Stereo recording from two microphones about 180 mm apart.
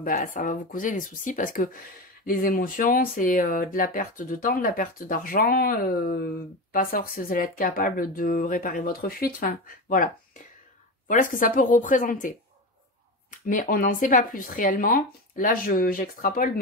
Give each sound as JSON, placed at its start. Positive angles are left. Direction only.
{"t": 0.0, "sound": "speech", "side_deg": 50}
{"t": 11.1, "sound": "speech", "side_deg": 50}
{"t": 13.5, "sound": "speech", "side_deg": 50}